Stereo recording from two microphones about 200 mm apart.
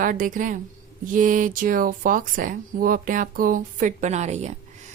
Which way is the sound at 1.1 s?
40° right (ahead or behind).